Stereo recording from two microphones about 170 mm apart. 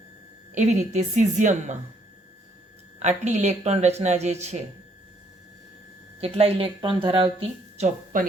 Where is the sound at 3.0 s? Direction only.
45° right (ahead or behind).